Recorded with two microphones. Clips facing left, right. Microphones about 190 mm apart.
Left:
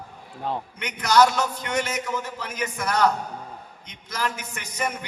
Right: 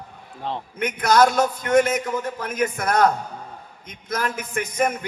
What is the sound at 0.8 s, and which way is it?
A man's voice, 50° right (ahead or behind).